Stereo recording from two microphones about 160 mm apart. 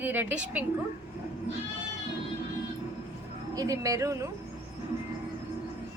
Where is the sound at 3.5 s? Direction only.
20° right (ahead or behind).